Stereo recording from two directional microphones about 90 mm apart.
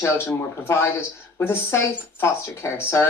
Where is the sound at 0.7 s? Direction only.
25° left (ahead or behind).